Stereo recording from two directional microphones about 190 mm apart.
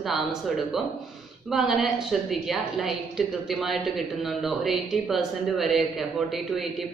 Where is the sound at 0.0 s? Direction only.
Centre (ahead or behind).